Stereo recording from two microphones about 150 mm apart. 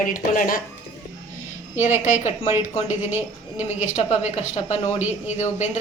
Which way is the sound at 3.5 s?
50° left (ahead or behind).